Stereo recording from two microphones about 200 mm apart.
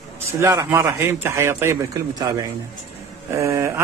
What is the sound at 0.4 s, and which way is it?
A man's voice, 15° right (ahead or behind).